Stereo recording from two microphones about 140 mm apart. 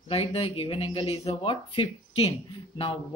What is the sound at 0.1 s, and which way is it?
Speech, 45° left (ahead or behind).